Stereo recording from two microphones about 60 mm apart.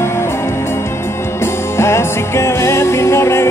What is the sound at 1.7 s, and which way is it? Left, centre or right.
Music, left.